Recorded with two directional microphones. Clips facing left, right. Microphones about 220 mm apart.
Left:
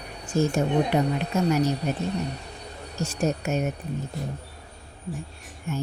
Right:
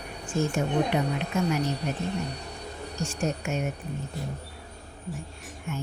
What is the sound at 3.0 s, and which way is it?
Speech, 40° left (ahead or behind).